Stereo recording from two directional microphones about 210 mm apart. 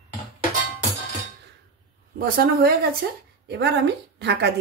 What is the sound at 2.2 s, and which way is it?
A woman's voice, 45° right (ahead or behind).